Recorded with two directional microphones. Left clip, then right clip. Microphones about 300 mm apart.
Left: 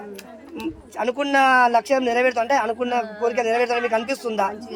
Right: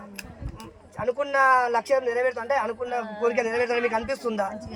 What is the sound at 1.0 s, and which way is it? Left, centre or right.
A man's voice, left.